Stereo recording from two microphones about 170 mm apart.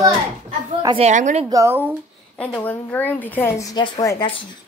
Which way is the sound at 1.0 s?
45° right (ahead or behind).